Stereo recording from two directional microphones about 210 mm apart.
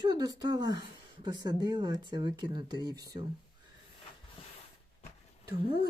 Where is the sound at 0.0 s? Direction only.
20° right (ahead or behind).